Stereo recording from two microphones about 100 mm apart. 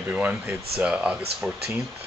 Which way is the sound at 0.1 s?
15° right (ahead or behind).